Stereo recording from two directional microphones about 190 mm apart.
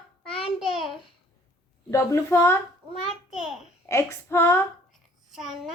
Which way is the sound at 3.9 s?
15° left (ahead or behind).